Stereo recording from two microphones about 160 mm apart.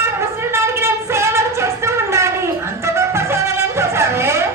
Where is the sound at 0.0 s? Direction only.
15° right (ahead or behind).